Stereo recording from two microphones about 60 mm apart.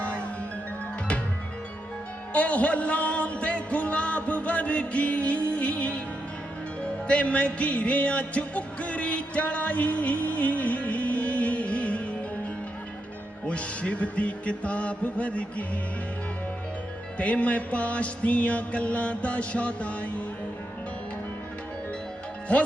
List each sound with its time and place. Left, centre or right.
2.3 s music: left
13.5 s music: left
17.2 s music: left